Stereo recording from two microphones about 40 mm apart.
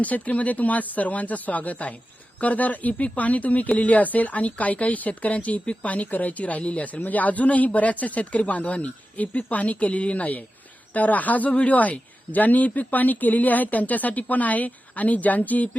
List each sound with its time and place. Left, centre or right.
0.0 s speech: left